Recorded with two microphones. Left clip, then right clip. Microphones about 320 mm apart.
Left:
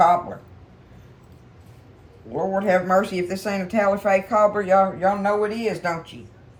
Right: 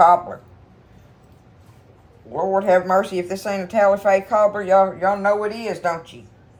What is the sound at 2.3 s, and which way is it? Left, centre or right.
Speech, centre.